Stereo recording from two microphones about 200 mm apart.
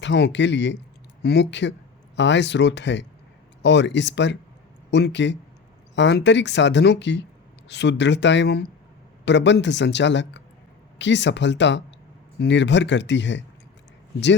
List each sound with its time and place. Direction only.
0.0 s speech: 60° left (ahead or behind)